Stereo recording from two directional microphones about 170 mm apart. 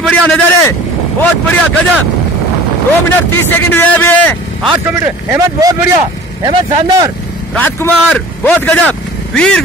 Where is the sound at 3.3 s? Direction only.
10° left (ahead or behind).